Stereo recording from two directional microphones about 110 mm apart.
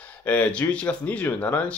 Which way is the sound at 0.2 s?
15° left (ahead or behind).